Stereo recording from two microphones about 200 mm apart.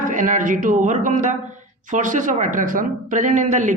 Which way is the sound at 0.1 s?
40° right (ahead or behind).